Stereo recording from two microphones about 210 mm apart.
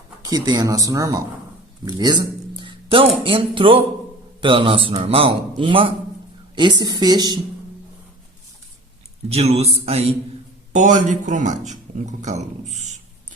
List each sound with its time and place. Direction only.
0.3 s a man's voice: 20° right (ahead or behind)
9.3 s a man's voice: 30° right (ahead or behind)